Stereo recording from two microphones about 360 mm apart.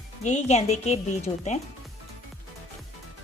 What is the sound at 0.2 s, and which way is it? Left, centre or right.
A woman's voice, centre.